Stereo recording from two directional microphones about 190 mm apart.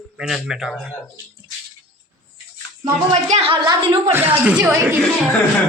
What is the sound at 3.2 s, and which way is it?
Speech, 35° right (ahead or behind).